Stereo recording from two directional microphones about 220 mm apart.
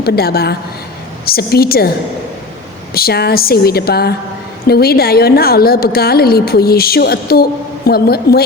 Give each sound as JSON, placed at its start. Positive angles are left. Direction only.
{"t": 0.0, "sound": "a woman's voice", "side_deg": 45}
{"t": 2.9, "sound": "a woman's voice", "side_deg": 45}